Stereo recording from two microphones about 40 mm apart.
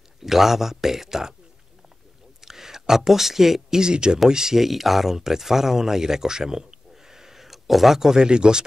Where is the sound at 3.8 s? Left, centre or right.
Right.